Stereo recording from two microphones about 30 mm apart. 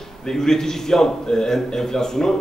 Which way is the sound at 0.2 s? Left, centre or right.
Centre.